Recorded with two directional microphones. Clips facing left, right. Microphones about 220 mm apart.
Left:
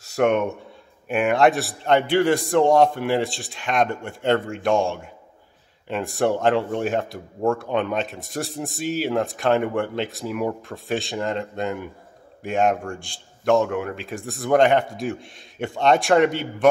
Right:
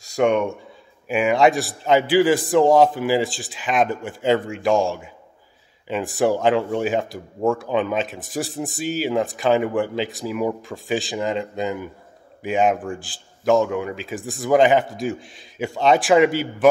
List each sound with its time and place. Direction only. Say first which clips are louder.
0.0 s speech: right 1 dB; 5° left (ahead or behind)